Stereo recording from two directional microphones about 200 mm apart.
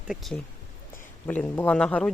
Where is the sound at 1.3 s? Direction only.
10° left (ahead or behind).